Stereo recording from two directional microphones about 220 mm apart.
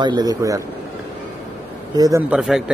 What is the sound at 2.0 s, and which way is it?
Speech, 15° right (ahead or behind).